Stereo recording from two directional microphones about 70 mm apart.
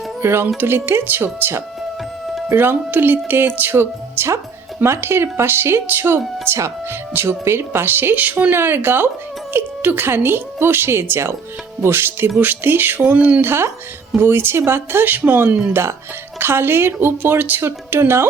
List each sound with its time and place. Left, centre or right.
0.2 s music: right
0.4 s speech: right
13.4 s speech: right